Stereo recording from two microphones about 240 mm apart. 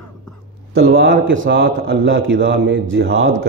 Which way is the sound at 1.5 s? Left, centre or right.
Right.